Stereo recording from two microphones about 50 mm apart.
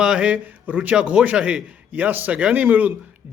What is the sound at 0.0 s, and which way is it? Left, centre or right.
Speech, centre.